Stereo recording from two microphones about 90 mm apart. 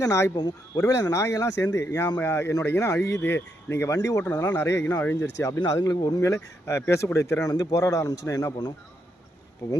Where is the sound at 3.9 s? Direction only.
40° left (ahead or behind).